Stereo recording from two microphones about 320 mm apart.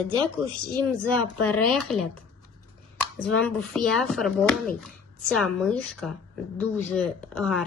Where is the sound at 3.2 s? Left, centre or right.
Centre.